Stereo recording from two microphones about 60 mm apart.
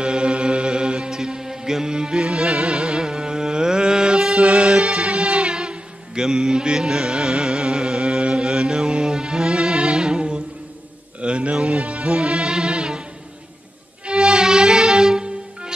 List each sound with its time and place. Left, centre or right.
0.0 s music: centre
11.1 s a sound: centre
11.5 s music: centre
14.0 s music: centre